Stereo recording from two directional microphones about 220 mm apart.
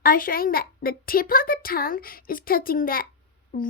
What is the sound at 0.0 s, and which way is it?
A child's voice, 40° left (ahead or behind).